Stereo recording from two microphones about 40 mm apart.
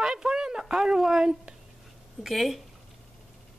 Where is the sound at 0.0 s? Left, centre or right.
Centre.